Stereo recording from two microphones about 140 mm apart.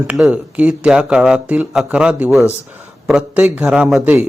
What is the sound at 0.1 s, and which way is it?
A man's voice, 5° right (ahead or behind).